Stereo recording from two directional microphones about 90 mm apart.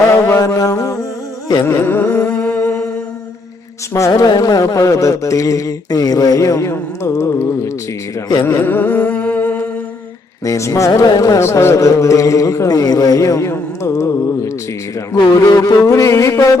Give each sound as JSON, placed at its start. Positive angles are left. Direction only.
{"t": 0.1, "sound": "mantra", "side_deg": 30}
{"t": 1.6, "sound": "music", "side_deg": 25}
{"t": 3.9, "sound": "a man's voice", "side_deg": 40}
{"t": 8.4, "sound": "music", "side_deg": 25}
{"t": 10.4, "sound": "a man's voice", "side_deg": 35}
{"t": 11.4, "sound": "a man's voice", "side_deg": 30}
{"t": 15.1, "sound": "music", "side_deg": 45}
{"t": 15.8, "sound": "a man's voice", "side_deg": 35}